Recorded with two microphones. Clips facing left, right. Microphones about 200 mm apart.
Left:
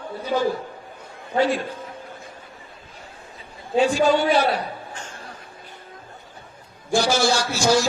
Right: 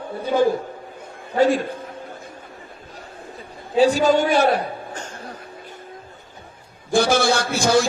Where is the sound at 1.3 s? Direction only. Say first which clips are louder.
Right 3 dB; 45° right (ahead or behind).